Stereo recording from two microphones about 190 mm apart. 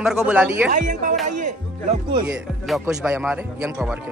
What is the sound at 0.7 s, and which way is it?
Speech, 45° right (ahead or behind).